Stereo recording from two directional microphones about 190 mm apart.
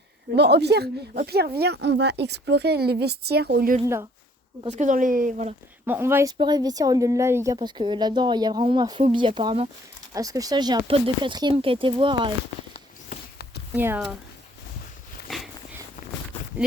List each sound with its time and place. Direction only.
0.3 s speech: 60° right (ahead or behind)
4.7 s speech: 40° right (ahead or behind)
5.8 s speech: 10° right (ahead or behind)
13.7 s speech: 10° right (ahead or behind)
15.3 s dog: centre (ahead or behind)